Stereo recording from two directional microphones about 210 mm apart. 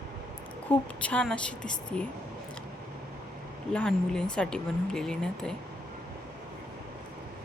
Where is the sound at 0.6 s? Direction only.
5° left (ahead or behind).